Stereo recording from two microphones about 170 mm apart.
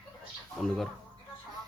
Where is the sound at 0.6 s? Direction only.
Centre (ahead or behind).